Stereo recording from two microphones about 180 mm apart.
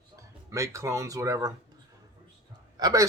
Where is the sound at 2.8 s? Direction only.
20° right (ahead or behind).